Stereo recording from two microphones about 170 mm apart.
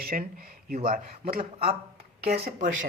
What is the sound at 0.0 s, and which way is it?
Speech, 55° right (ahead or behind).